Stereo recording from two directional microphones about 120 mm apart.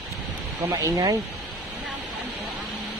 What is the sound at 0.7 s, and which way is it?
Speech, 30° right (ahead or behind).